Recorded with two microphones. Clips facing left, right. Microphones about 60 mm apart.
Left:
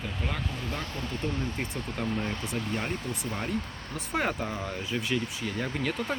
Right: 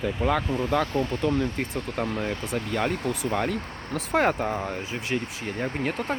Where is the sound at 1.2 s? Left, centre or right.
Right.